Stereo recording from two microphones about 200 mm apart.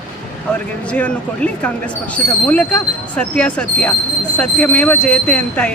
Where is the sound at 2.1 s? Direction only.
5° left (ahead or behind).